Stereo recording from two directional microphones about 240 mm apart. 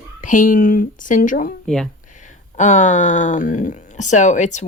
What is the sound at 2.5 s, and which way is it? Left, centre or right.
A woman's voice, left.